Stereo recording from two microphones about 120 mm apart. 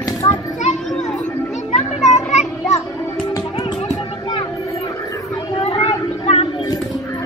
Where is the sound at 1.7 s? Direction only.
70° left (ahead or behind).